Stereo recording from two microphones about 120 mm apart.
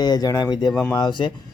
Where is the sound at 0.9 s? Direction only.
35° left (ahead or behind).